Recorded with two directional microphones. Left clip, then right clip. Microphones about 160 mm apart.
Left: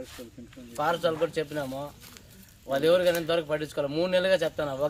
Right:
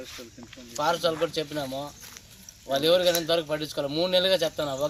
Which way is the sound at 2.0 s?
65° left (ahead or behind).